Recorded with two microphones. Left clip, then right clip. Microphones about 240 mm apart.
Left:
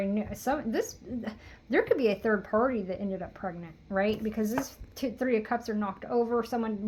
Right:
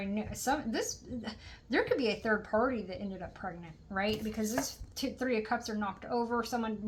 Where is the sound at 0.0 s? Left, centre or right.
Left.